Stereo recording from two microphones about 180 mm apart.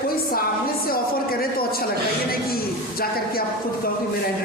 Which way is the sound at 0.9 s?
55° left (ahead or behind).